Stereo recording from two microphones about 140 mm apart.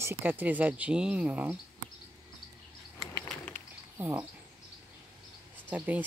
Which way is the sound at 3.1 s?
15° left (ahead or behind).